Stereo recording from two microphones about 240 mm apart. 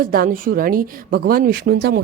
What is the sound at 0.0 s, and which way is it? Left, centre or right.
A woman's voice, right.